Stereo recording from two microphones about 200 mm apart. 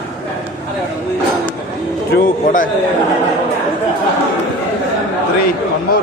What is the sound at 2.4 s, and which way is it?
Speech, 40° left (ahead or behind).